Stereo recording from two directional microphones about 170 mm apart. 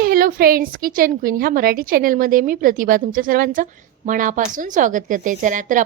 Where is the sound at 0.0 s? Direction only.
60° right (ahead or behind).